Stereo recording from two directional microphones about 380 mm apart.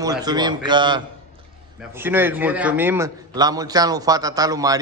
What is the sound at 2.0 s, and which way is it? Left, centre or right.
A man's voice, centre.